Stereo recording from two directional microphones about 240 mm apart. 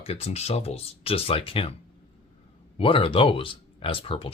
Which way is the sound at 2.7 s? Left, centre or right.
Left.